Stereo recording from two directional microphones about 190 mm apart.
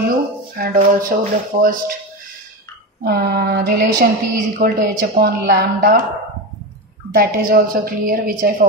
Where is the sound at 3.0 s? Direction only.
60° right (ahead or behind).